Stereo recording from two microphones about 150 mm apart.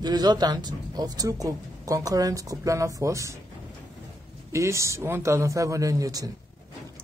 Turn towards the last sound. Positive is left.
turn(degrees=-25)  # may be behind; listen again after turning